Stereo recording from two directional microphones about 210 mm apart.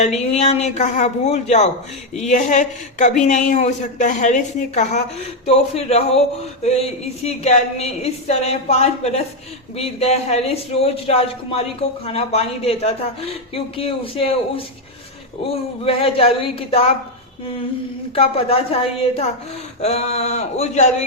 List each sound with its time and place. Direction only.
0.0 s a man's voice: 30° left (ahead or behind)
18.1 s a man's voice: 30° left (ahead or behind)